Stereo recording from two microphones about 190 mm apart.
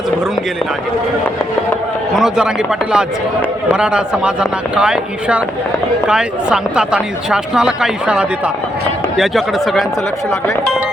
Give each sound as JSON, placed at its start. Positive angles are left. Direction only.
{"t": 2.1, "sound": "speech", "side_deg": -5}